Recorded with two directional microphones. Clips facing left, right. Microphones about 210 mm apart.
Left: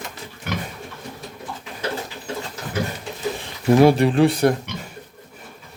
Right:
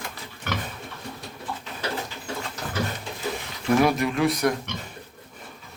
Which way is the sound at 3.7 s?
30° left (ahead or behind).